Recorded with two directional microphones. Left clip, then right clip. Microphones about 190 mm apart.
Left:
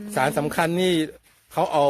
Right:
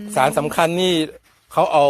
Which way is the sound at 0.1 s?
20° left (ahead or behind).